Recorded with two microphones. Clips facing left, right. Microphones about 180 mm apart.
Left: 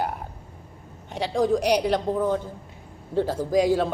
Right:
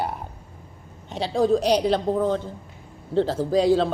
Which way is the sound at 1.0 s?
15° left (ahead or behind).